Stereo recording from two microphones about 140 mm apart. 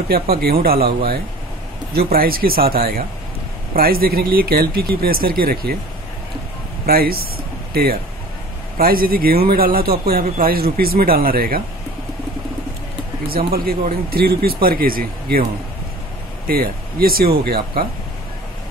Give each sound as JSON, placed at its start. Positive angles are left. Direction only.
{"t": 0.1, "sound": "speech", "side_deg": -90}
{"t": 6.9, "sound": "speech", "side_deg": -90}
{"t": 13.3, "sound": "speech", "side_deg": -90}
{"t": 16.4, "sound": "speech", "side_deg": -90}